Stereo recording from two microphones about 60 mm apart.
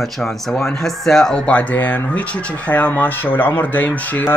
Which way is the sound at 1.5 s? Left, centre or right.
Left.